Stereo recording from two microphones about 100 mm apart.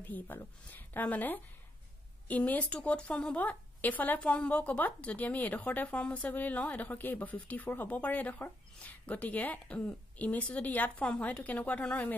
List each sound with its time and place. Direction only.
0.0 s speech: 20° left (ahead or behind)